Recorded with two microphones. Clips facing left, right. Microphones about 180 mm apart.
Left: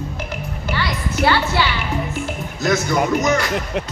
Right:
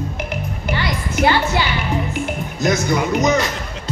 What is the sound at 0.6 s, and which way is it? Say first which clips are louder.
Music: even; 20° right (ahead or behind).